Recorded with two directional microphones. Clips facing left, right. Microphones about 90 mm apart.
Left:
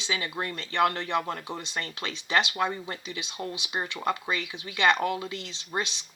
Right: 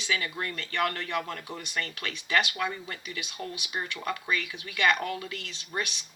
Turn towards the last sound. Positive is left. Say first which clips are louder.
# left 2 dB
turn(degrees=20)  # may be behind; listen again after turning